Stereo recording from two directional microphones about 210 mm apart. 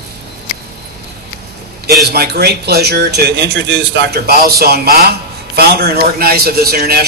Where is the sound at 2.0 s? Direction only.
50° right (ahead or behind).